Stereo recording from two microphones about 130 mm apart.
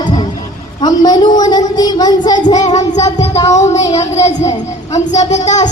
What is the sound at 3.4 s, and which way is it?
Speech, 25° left (ahead or behind).